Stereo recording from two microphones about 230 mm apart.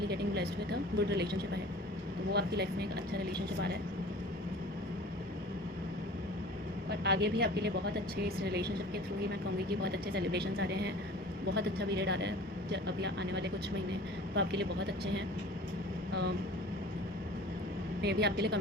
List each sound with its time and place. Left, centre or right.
0.1 s a woman's voice: right
7.0 s a woman's voice: right
9.6 s a woman's voice: right
18.0 s a woman's voice: right